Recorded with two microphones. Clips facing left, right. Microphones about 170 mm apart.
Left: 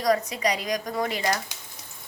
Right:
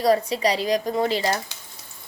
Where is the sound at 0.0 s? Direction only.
30° right (ahead or behind).